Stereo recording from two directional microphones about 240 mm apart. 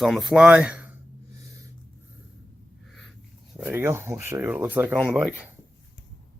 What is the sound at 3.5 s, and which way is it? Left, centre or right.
Speech, centre.